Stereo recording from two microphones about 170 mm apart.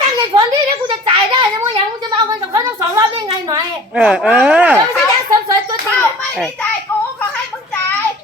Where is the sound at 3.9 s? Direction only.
5° right (ahead or behind).